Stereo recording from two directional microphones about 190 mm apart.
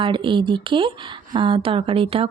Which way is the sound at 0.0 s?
25° right (ahead or behind).